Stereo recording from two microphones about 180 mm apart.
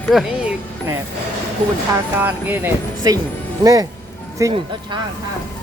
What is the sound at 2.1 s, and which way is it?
Speech, 10° right (ahead or behind).